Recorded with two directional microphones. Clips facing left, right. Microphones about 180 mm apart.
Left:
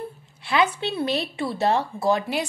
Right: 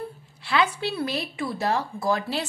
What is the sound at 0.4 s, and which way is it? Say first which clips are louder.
Speech: left 2 dB; 20° left (ahead or behind).